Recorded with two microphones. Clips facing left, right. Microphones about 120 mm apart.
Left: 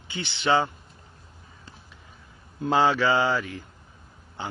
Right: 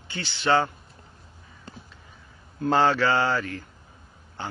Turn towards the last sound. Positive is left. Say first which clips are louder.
# even
turn(degrees=15)  # may be behind; listen again after turning